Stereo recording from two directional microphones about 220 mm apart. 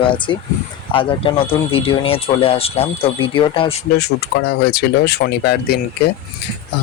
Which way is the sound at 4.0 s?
45° left (ahead or behind).